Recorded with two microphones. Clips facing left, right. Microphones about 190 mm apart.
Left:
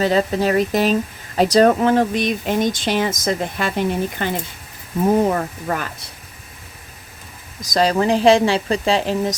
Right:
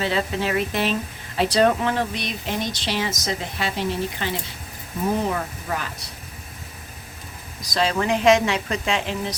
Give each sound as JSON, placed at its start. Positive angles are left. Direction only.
{"t": 0.0, "sound": "speech", "side_deg": 40}
{"t": 7.6, "sound": "speech", "side_deg": 40}